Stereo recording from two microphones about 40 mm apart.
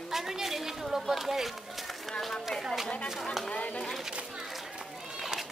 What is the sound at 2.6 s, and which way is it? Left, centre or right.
Speech, centre.